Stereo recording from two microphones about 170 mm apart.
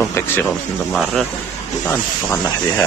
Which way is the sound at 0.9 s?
Centre (ahead or behind).